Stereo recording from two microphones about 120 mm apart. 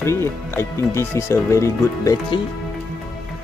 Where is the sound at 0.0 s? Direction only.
20° left (ahead or behind).